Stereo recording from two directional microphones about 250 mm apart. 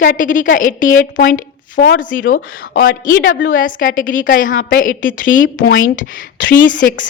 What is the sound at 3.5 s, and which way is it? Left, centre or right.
A woman's voice, left.